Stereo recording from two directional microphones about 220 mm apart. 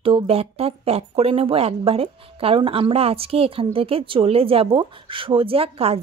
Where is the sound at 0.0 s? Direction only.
25° right (ahead or behind).